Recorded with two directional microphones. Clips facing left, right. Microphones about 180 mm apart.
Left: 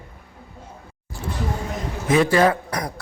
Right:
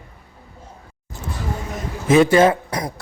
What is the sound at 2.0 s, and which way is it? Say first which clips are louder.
Speech: right 4 dB; 25° right (ahead or behind).